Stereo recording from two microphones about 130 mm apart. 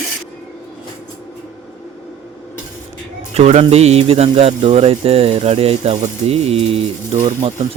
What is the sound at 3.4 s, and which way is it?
Pigeon, 55° right (ahead or behind).